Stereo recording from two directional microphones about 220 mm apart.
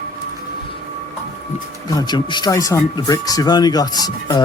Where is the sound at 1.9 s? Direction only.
15° left (ahead or behind).